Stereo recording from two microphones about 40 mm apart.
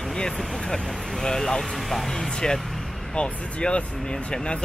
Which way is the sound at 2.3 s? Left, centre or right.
Centre.